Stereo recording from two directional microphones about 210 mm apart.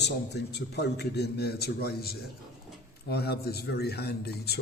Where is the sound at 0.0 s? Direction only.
55° left (ahead or behind).